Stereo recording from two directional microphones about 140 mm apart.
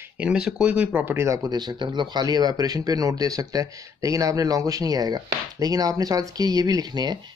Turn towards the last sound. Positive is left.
turn(degrees=-30)  # may be behind; listen again after turning